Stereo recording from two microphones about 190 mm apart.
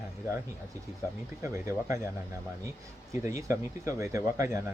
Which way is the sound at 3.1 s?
15° right (ahead or behind).